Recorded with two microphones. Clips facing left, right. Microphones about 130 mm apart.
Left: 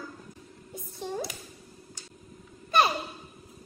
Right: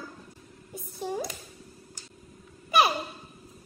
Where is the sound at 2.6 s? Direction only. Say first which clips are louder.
Right 1 dB; 10° right (ahead or behind).